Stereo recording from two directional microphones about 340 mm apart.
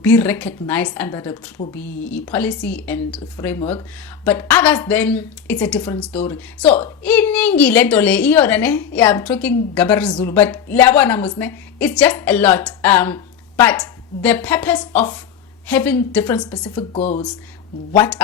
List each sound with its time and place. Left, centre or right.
0.0 s speech: centre
16.9 s speech: centre
17.9 s speech: centre